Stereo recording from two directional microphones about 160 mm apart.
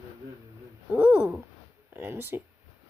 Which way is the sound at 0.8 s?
10° right (ahead or behind).